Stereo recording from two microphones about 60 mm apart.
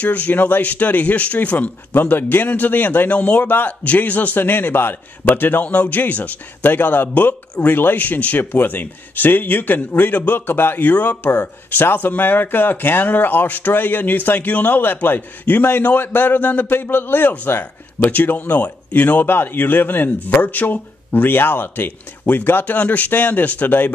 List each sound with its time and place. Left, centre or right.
0.0 s speech: left